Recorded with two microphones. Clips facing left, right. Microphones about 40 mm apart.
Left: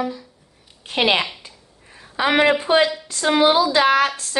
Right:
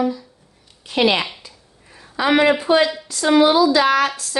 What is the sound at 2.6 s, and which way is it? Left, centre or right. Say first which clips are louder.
A woman's voice: right 1 dB; left.